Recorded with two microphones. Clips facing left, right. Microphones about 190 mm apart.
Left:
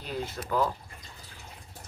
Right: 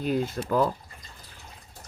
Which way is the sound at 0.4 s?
35° right (ahead or behind).